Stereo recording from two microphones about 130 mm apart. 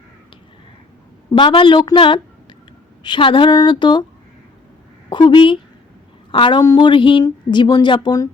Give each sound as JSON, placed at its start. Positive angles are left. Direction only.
{"t": 1.4, "sound": "speech", "side_deg": 40}
{"t": 5.0, "sound": "speech", "side_deg": 35}